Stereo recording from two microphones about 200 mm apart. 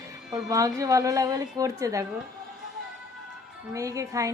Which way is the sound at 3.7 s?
15° right (ahead or behind).